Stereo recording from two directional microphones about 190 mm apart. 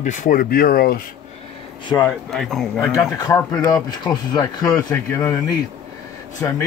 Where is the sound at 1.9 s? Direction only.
5° left (ahead or behind).